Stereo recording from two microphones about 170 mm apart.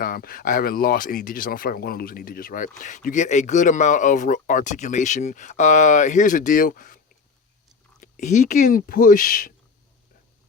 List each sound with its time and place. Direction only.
0.0 s speech: 60° left (ahead or behind)
8.0 s speech: 45° left (ahead or behind)